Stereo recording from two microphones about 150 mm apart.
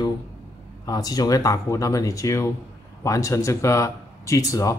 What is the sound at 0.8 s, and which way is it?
Speech, 25° left (ahead or behind).